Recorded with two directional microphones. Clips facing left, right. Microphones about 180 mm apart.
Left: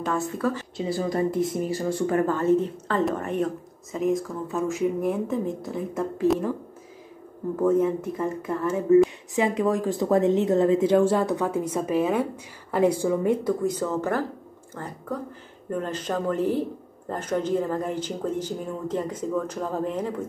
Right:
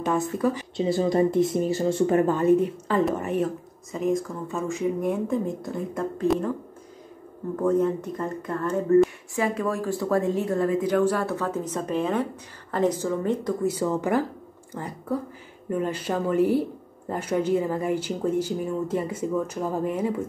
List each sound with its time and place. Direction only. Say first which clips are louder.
0.0 s speech: right 2 dB; 15° right (ahead or behind); by 6.5 s 5° left (ahead or behind)
7.5 s speech: left 1 dB; 5° left (ahead or behind)
9.3 s speech: left 3 dB; 20° left (ahead or behind)
13.7 s speech: right 1 dB; 10° right (ahead or behind)